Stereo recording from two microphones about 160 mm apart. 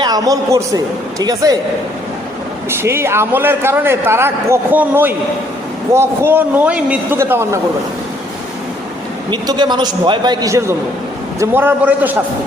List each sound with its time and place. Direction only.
0.0 s a man's voice: 25° right (ahead or behind)
2.6 s a man's voice: 15° right (ahead or behind)
9.3 s a man's voice: 30° right (ahead or behind); by 12.1 s 10° right (ahead or behind)